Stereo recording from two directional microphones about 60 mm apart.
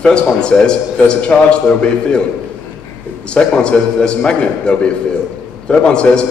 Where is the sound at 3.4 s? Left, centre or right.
Centre.